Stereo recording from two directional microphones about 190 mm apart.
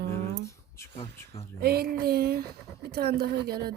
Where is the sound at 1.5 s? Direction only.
55° right (ahead or behind).